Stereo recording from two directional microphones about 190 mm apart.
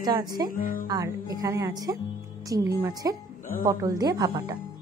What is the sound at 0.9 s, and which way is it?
A woman's voice, 20° right (ahead or behind).